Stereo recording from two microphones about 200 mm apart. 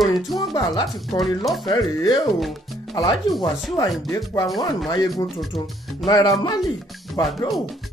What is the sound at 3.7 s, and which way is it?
Speech, 15° left (ahead or behind).